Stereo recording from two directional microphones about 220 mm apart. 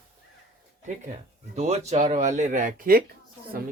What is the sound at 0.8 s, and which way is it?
Speech, 35° right (ahead or behind).